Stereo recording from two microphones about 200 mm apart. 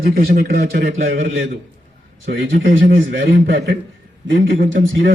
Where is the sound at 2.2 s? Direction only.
50° right (ahead or behind).